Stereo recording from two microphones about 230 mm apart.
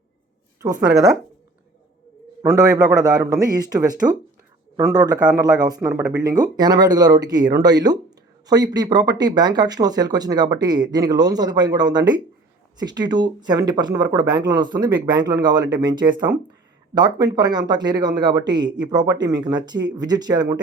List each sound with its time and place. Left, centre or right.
2.4 s speech: centre